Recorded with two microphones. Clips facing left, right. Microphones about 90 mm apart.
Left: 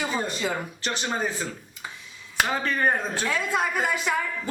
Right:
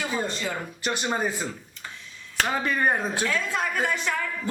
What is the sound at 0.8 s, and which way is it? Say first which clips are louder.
Speech: right 5 dB; 10° right (ahead or behind).